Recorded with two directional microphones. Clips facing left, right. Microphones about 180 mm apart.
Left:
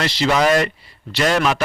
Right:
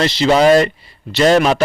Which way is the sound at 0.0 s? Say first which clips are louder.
Right 5 dB; 25° right (ahead or behind).